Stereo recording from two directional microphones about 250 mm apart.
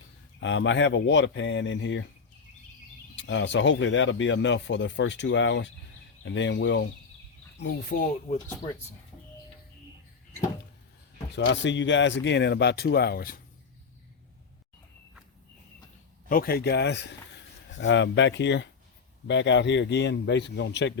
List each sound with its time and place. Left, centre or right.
0.3 s speech: left
3.2 s speech: left
8.3 s speech: left
11.3 s speech: left
16.3 s speech: left